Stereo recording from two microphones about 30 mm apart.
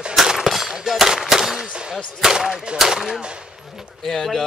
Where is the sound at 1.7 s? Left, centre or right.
Right.